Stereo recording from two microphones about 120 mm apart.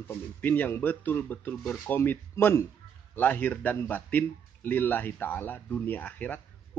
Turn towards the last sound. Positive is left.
turn(degrees=15)  # may be behind; listen again after turning